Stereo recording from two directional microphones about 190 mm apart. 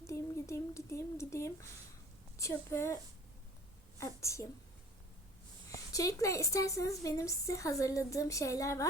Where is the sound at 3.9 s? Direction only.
15° left (ahead or behind).